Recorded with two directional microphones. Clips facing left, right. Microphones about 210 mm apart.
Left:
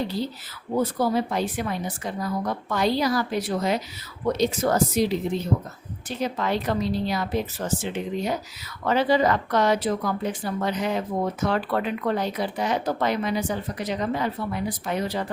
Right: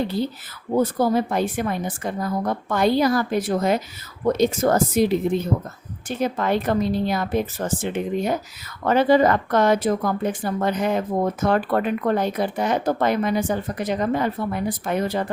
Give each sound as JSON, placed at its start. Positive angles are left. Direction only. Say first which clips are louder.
{"t": 0.8, "sound": "speech", "louder": "right 3 dB", "side_deg": -50}